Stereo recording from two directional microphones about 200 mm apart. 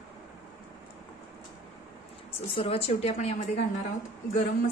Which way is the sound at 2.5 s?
30° left (ahead or behind).